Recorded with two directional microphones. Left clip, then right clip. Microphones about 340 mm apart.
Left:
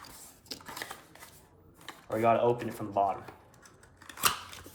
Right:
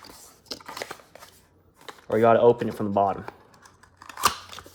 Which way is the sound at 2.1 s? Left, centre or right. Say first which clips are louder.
Right 8 dB; right.